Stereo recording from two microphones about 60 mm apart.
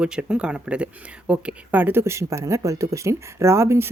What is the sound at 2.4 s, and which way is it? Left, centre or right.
Speech, right.